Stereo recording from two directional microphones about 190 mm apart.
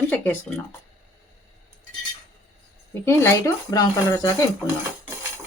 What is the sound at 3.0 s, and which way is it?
Speech, 15° left (ahead or behind).